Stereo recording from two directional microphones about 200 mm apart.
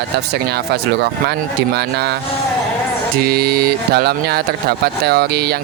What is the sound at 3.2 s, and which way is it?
Speech, 50° right (ahead or behind).